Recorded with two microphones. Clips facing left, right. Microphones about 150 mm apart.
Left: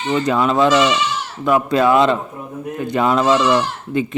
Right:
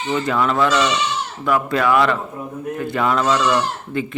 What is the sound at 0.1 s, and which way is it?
Speech, 20° left (ahead or behind).